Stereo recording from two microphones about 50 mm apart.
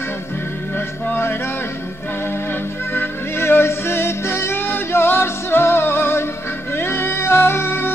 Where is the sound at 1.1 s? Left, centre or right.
Left.